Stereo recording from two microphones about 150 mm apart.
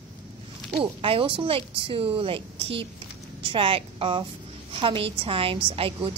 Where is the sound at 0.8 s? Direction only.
40° right (ahead or behind).